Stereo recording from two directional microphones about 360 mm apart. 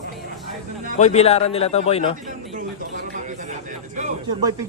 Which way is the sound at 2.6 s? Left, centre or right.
Right.